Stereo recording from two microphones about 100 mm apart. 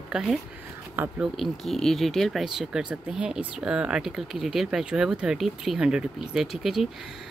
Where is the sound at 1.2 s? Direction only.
Centre (ahead or behind).